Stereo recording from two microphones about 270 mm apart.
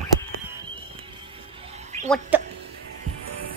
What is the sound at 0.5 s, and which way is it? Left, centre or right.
Music, centre.